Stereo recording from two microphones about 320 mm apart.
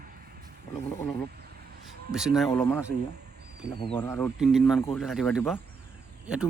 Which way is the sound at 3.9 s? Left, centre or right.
Centre.